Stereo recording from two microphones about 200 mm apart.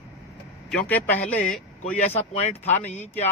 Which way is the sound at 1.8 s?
35° left (ahead or behind).